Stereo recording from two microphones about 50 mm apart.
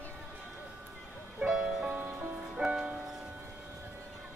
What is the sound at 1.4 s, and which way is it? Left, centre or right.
Music, centre.